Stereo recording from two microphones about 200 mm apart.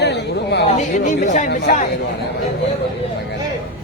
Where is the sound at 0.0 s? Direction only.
55° left (ahead or behind).